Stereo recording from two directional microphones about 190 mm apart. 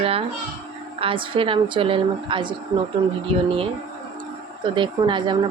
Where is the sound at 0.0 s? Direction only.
30° right (ahead or behind).